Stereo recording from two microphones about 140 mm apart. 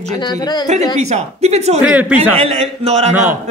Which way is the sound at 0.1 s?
30° left (ahead or behind).